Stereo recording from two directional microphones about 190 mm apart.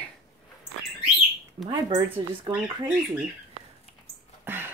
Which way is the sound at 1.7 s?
20° right (ahead or behind).